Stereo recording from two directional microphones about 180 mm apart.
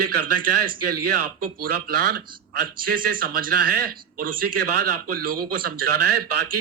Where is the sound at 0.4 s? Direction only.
55° right (ahead or behind).